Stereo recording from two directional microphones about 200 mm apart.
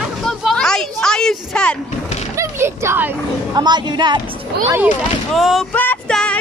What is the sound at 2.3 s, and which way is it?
Speech, 15° right (ahead or behind).